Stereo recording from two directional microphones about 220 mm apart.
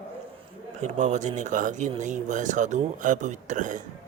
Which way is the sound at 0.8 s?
30° right (ahead or behind).